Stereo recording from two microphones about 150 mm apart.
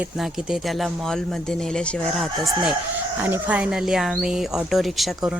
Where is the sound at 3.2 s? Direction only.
10° right (ahead or behind).